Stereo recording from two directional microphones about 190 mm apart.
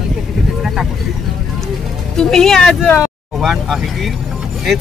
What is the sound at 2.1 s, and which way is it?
Speech, 5° left (ahead or behind).